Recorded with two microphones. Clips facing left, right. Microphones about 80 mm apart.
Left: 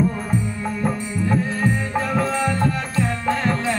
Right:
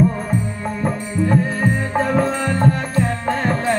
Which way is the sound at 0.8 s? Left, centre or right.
Right.